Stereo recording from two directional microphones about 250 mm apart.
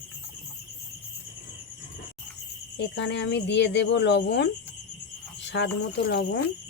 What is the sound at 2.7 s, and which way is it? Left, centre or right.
Speech, left.